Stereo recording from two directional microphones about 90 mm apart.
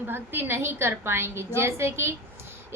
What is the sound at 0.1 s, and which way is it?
A woman's voice, 25° right (ahead or behind).